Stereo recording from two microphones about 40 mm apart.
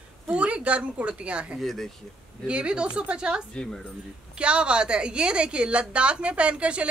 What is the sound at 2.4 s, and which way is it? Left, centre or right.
A woman's voice, right.